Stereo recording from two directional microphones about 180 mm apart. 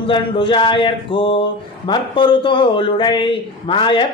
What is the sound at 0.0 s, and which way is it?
A man's voice, 30° left (ahead or behind).